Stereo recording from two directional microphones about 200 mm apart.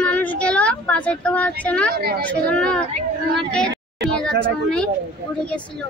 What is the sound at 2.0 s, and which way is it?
Speech, 50° right (ahead or behind).